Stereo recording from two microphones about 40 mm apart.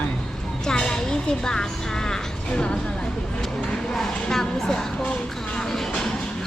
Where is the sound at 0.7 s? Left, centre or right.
Centre.